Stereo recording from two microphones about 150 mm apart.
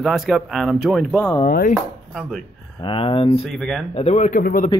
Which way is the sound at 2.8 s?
35° left (ahead or behind).